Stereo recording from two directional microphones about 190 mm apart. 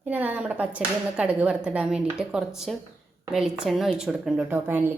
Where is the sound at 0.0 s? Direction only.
10° right (ahead or behind).